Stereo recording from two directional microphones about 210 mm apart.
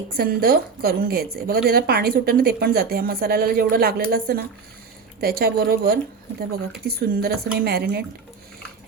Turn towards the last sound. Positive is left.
turn(degrees=-50)  # may be behind; listen again after turning